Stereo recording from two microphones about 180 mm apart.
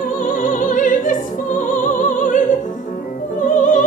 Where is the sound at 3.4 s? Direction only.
45° left (ahead or behind).